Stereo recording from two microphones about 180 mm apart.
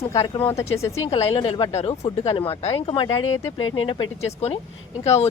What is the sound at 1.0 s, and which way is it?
Speech, 30° left (ahead or behind).